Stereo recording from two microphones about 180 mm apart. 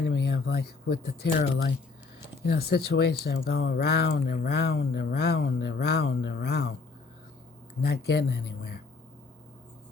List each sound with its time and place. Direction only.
0.0 s speech: 70° left (ahead or behind)
7.8 s speech: 65° left (ahead or behind)